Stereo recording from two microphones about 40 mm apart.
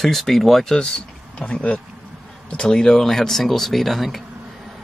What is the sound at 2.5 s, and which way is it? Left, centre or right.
Speech, centre.